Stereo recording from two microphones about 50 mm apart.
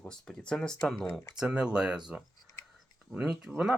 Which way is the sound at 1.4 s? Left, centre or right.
Centre.